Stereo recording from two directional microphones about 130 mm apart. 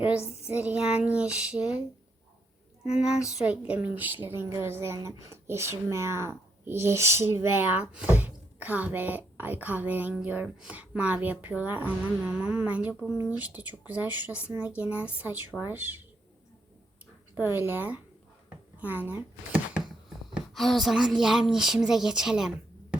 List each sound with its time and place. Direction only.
0.3 s speech: 10° right (ahead or behind)
2.9 s speech: 5° right (ahead or behind)
17.3 s speech: 15° right (ahead or behind)
18.4 s a sound: 15° right (ahead or behind)
20.3 s speech: centre (ahead or behind)